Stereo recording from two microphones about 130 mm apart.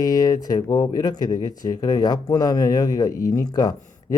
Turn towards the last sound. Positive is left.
turn(degrees=30)  # may be behind; listen again after turning